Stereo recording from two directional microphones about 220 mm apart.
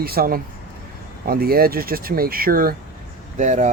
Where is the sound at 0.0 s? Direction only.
45° right (ahead or behind).